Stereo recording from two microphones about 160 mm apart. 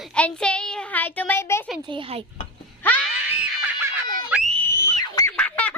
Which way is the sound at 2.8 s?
10° left (ahead or behind).